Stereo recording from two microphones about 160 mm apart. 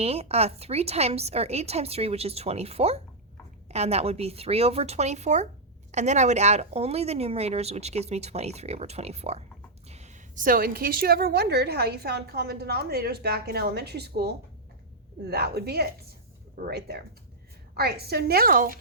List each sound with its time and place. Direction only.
0.0 s a woman's voice: 40° right (ahead or behind); by 18.8 s 65° right (ahead or behind)